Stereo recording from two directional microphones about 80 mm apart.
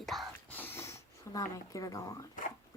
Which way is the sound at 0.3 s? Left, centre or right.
Left.